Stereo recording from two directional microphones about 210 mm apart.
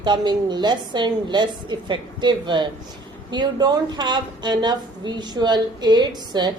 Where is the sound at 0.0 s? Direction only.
20° right (ahead or behind).